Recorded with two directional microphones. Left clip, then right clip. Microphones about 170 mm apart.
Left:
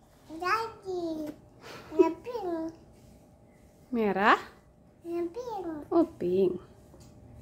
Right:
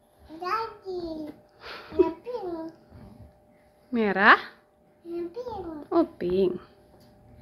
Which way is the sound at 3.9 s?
15° left (ahead or behind).